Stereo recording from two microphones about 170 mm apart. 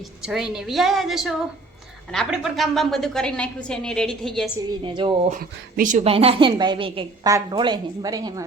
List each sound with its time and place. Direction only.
0.2 s a woman's voice: 5° right (ahead or behind)
4.8 s a woman's voice: 30° right (ahead or behind)
5.3 s speech: 55° right (ahead or behind)
6.1 s a woman's voice: 35° right (ahead or behind)